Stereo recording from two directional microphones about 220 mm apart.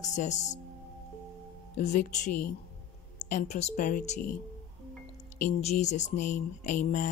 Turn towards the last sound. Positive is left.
turn(degrees=35)  # may be behind; listen again after turning